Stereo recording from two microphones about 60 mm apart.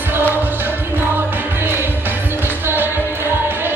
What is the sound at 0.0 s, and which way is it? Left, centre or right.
Music, right.